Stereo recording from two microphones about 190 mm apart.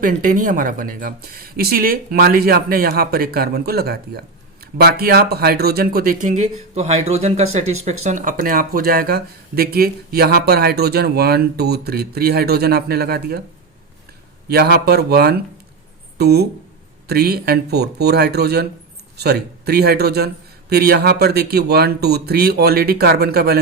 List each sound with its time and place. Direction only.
0.0 s speech: 45° right (ahead or behind)
14.5 s speech: 60° right (ahead or behind)